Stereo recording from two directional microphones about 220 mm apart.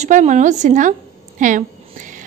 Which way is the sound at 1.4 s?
35° right (ahead or behind).